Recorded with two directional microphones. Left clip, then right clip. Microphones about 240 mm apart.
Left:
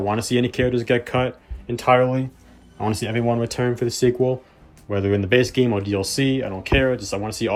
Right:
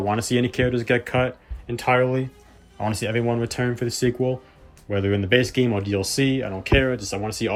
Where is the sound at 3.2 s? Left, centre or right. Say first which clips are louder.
Left 5 dB; right.